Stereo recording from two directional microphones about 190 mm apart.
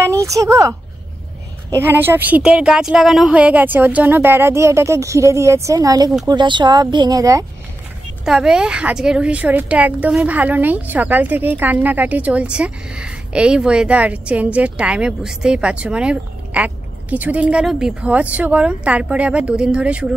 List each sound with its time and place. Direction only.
0.0 s speech: 15° right (ahead or behind)
1.8 s a woman's voice: 10° right (ahead or behind)
8.3 s a woman's voice: 5° right (ahead or behind)